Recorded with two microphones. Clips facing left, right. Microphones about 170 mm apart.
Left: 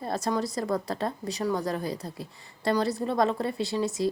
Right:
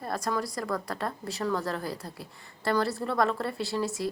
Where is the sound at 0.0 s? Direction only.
25° left (ahead or behind).